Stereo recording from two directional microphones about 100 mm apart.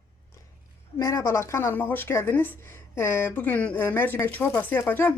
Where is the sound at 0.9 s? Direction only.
35° left (ahead or behind).